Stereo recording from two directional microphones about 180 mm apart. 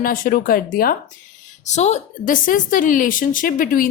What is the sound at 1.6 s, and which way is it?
A woman's voice, 40° left (ahead or behind).